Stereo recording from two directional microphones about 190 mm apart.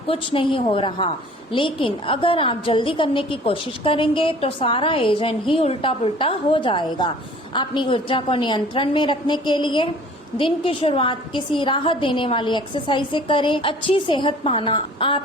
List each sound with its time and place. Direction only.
0.1 s a woman's voice: 25° left (ahead or behind)